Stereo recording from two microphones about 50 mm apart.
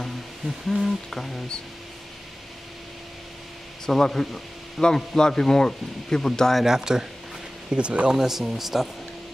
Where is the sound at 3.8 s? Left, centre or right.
Centre.